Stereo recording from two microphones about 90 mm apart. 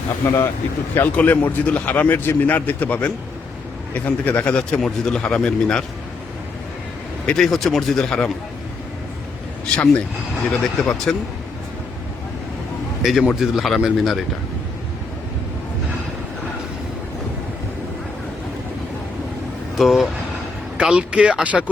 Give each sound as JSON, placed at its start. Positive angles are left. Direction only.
{"t": 0.2, "sound": "a man's voice", "side_deg": 20}
{"t": 7.3, "sound": "a man's voice", "side_deg": 5}
{"t": 9.6, "sound": "a man's voice", "side_deg": 15}
{"t": 13.0, "sound": "a man's voice", "side_deg": -5}
{"t": 19.7, "sound": "a man's voice", "side_deg": 0}
{"t": 20.7, "sound": "speech", "side_deg": -10}